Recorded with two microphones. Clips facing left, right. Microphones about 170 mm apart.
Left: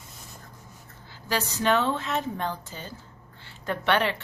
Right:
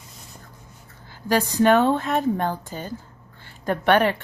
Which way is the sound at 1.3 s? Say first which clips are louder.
Right 7 dB; 50° right (ahead or behind).